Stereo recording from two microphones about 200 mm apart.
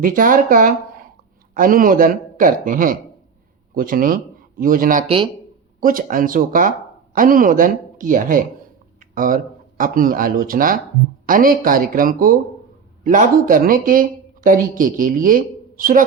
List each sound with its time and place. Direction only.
0.0 s speech: 45° right (ahead or behind)
5.0 s speech: 25° right (ahead or behind)
5.8 s speech: 45° right (ahead or behind)